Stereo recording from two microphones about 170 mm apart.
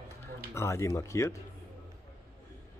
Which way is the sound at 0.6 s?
15° left (ahead or behind).